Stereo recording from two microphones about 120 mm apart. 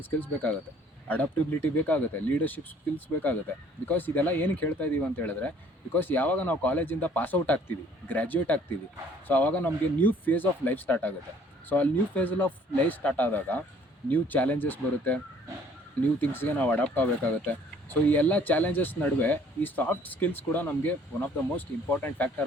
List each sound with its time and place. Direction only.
0.0 s speech: 15° left (ahead or behind)
3.8 s speech: 15° left (ahead or behind)
16.2 s speech: 15° left (ahead or behind)